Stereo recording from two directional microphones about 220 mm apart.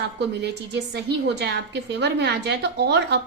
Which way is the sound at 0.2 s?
50° right (ahead or behind).